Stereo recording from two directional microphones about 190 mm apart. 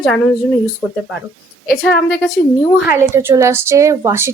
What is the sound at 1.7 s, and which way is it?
Speech, centre (ahead or behind).